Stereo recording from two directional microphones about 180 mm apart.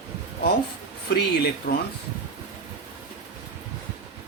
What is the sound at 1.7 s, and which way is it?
Speech, 60° left (ahead or behind).